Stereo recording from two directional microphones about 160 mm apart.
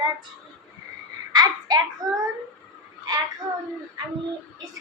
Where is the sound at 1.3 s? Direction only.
25° right (ahead or behind).